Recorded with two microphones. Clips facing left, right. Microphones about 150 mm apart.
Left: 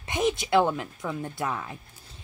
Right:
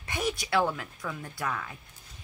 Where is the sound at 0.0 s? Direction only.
20° left (ahead or behind).